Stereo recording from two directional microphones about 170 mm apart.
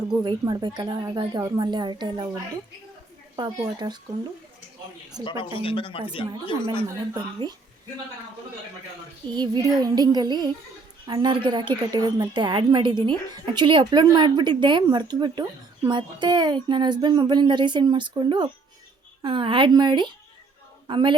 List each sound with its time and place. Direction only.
0.2 s a woman's voice: 25° right (ahead or behind)
3.3 s a woman's voice: 25° right (ahead or behind)
5.2 s speech: 30° left (ahead or behind)
9.3 s a woman's voice: 25° right (ahead or behind)